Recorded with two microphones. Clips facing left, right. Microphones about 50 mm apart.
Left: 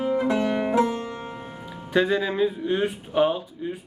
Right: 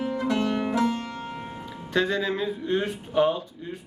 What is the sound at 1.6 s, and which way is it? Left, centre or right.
Speech, centre.